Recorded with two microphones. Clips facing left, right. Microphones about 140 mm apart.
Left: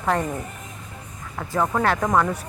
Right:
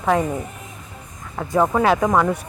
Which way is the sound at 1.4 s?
20° right (ahead or behind).